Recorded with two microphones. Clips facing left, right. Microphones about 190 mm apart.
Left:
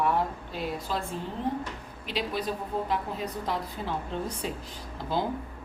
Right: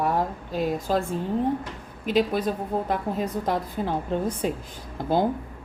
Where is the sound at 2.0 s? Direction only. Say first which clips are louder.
Right 9 dB; 45° right (ahead or behind).